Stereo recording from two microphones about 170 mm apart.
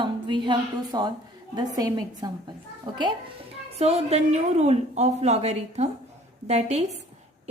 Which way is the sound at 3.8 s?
40° right (ahead or behind).